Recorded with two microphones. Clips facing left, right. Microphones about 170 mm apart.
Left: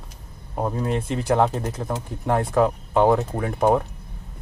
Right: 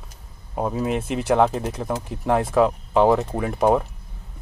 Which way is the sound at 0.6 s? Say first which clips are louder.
Right 1 dB; 5° right (ahead or behind).